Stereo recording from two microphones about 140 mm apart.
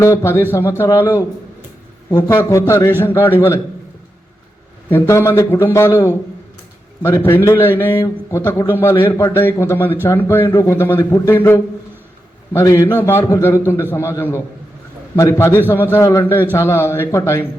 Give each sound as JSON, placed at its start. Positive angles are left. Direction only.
{"t": 0.0, "sound": "a man's voice", "side_deg": 20}
{"t": 2.2, "sound": "a man's voice", "side_deg": 20}
{"t": 4.9, "sound": "a man's voice", "side_deg": 20}